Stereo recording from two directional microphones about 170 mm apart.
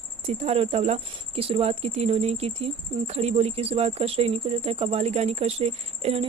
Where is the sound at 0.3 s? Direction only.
40° right (ahead or behind).